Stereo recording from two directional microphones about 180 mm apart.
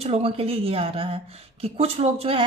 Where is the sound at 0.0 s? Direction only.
35° right (ahead or behind).